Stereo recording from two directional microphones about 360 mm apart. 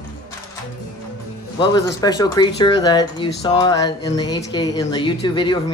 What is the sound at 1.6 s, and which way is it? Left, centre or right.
Speech, centre.